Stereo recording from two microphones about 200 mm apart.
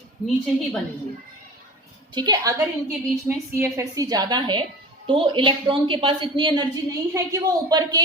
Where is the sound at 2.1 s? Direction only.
20° right (ahead or behind).